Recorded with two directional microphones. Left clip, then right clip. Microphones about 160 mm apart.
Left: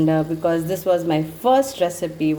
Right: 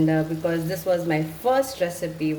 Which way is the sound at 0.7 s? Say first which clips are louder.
Left 4 dB; 40° left (ahead or behind).